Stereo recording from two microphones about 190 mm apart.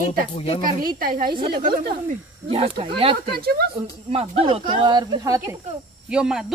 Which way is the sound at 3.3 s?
55° right (ahead or behind).